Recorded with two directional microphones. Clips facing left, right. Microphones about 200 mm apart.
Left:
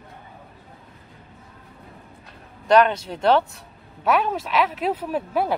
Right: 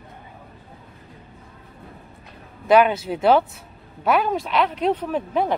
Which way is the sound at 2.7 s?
5° right (ahead or behind).